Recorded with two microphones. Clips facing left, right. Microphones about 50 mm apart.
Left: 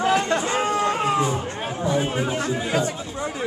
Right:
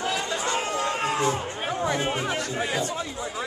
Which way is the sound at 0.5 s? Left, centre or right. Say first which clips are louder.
Left 4 dB; centre.